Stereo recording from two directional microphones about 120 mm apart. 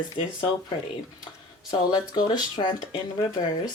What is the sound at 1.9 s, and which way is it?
Speech, 35° left (ahead or behind).